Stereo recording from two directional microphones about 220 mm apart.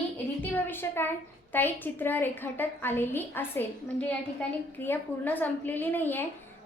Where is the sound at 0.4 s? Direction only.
10° left (ahead or behind).